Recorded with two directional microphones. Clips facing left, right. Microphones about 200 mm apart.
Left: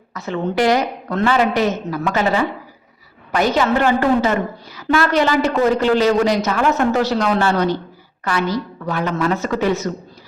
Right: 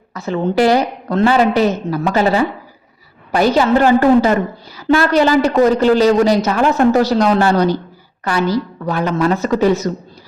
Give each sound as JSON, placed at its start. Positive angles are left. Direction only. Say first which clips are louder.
{"t": 0.1, "sound": "a woman's voice", "louder": "right 4 dB", "side_deg": -30}